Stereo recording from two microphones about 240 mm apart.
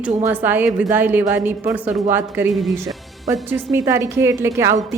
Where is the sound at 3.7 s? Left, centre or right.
Centre.